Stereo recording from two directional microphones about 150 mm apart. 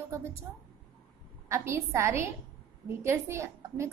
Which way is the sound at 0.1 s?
20° right (ahead or behind).